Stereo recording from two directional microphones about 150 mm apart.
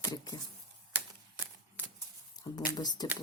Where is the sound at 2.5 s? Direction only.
30° left (ahead or behind).